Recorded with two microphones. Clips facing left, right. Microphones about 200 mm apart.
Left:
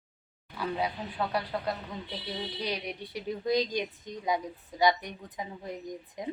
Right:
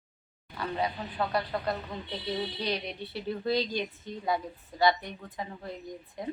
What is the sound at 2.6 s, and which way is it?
A woman's voice, 10° left (ahead or behind).